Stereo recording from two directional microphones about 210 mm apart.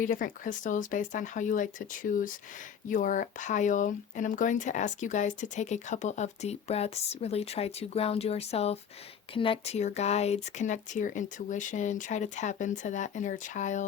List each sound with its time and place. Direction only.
0.0 s speech: 40° left (ahead or behind)